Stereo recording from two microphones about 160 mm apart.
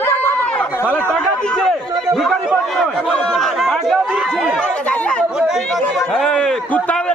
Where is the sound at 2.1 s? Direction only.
Centre (ahead or behind).